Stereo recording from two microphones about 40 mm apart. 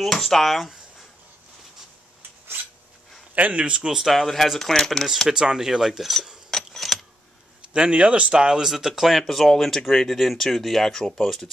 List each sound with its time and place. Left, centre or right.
0.0 s speech: centre
3.3 s speech: right
3.8 s speech: centre
4.1 s speech: centre
5.3 s speech: centre
6.5 s vehicle: centre
7.7 s speech: right
8.6 s speech: centre
9.3 s speech: centre